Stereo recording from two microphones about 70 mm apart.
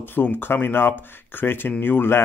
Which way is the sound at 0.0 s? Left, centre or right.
Left.